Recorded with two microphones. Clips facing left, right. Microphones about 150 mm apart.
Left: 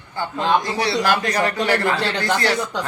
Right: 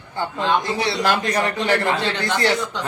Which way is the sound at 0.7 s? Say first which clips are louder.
Left 1 dB; 25° right (ahead or behind).